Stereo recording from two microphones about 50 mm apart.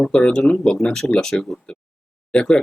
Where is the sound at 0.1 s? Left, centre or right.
Centre.